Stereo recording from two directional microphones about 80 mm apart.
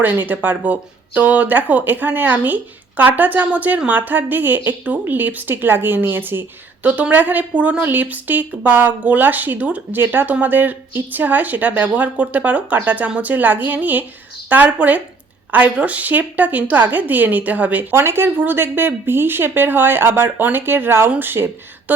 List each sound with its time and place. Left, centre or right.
0.0 s speech: right